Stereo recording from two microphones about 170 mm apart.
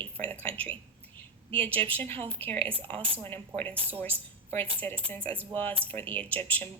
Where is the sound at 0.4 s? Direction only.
10° left (ahead or behind).